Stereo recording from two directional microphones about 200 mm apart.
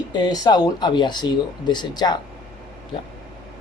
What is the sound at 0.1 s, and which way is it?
Speech, 20° left (ahead or behind).